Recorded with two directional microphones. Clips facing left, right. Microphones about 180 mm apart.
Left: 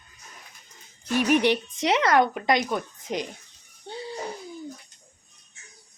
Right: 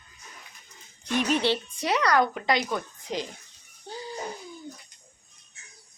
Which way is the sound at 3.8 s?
30° left (ahead or behind).